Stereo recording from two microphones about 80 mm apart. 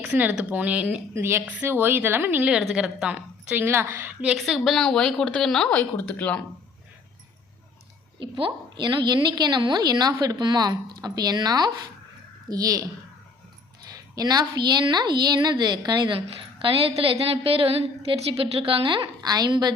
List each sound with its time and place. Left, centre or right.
0.3 s speech: centre
1.1 s a woman's voice: right
2.5 s speech: centre
3.2 s a woman's voice: right
4.4 s a woman's voice: centre
5.7 s speech: left
8.2 s a woman's voice: right
9.9 s speech: right
12.5 s speech: right
13.9 s a woman's voice: right
18.9 s speech: right